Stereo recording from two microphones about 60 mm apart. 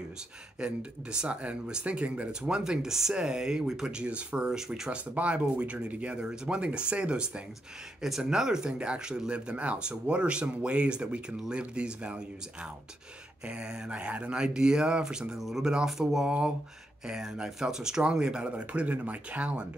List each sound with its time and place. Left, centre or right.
0.6 s speech: centre
2.6 s speech: centre
4.0 s speech: centre
4.6 s speech: centre
4.9 s speech: right
13.5 s speech: centre